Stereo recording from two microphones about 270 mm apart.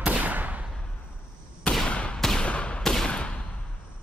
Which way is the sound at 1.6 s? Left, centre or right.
Centre.